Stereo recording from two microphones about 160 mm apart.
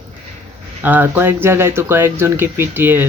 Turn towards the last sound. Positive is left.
turn(degrees=-15)  # may be behind; listen again after turning